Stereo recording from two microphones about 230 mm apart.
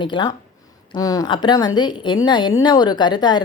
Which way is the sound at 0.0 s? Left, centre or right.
Centre.